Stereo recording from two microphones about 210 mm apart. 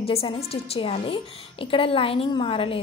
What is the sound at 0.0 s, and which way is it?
A woman's voice, 25° left (ahead or behind).